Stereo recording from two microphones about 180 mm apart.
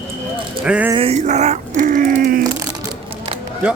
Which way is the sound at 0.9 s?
35° right (ahead or behind).